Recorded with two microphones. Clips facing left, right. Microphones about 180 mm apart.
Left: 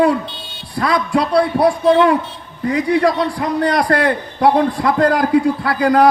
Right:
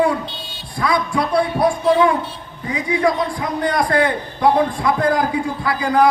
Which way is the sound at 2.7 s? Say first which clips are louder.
Left 4 dB; 70° left (ahead or behind).